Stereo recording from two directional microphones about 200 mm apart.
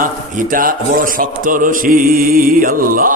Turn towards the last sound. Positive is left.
turn(degrees=-45)  # may be behind; listen again after turning